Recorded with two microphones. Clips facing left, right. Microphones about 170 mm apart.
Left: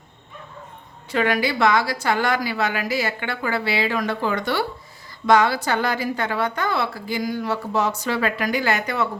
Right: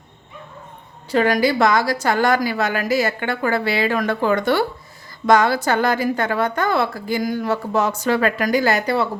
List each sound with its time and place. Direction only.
1.1 s a woman's voice: 40° right (ahead or behind)